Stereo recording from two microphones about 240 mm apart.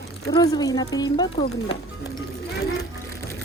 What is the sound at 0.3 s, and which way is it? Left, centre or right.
Speech, centre.